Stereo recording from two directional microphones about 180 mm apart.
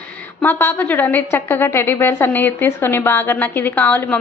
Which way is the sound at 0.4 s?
10° left (ahead or behind).